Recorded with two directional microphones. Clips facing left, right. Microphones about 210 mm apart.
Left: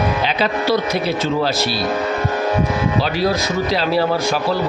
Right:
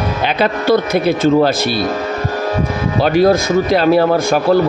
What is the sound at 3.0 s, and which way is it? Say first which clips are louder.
Speech: right 7 dB; 50° right (ahead or behind).